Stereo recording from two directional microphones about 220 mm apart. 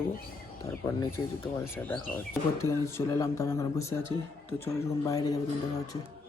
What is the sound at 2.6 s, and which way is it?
Speech, 15° left (ahead or behind).